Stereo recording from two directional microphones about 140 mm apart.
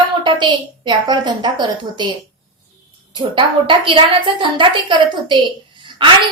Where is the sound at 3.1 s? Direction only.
35° right (ahead or behind).